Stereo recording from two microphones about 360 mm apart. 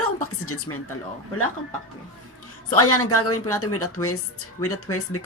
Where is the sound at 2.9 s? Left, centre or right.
Left.